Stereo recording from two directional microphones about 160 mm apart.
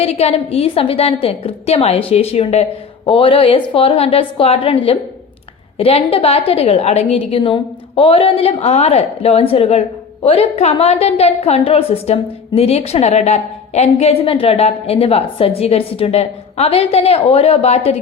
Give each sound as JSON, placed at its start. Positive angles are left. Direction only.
{"t": 0.0, "sound": "a woman's voice", "side_deg": 40}